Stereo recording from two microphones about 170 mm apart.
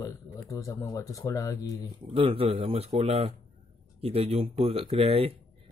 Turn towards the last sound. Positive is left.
turn(degrees=-35)  # may be behind; listen again after turning